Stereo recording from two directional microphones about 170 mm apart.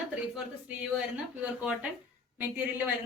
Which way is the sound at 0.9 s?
5° right (ahead or behind).